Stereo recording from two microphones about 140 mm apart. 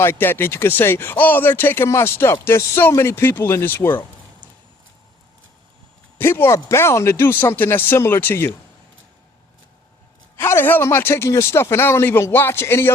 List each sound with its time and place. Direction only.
0.0 s speech: 15° left (ahead or behind)
6.1 s speech: 15° left (ahead or behind)
10.3 s speech: 15° left (ahead or behind)